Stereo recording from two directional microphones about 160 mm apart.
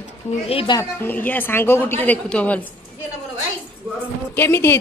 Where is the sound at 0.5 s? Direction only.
35° left (ahead or behind).